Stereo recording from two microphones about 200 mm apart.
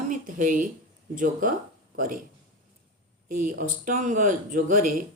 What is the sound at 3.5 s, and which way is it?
A woman's voice, 45° right (ahead or behind).